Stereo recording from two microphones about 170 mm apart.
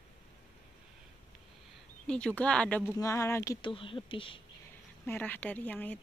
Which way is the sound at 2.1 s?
5° left (ahead or behind).